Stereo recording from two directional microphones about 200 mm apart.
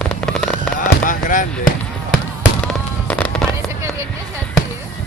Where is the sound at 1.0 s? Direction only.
40° left (ahead or behind).